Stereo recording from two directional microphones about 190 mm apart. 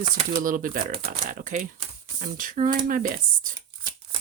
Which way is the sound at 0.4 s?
45° right (ahead or behind).